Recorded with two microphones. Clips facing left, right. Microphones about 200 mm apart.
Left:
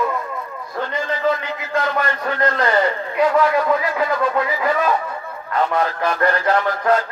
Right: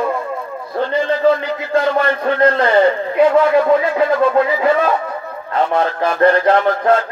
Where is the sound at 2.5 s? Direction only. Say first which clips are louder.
Right 4 dB; 30° right (ahead or behind).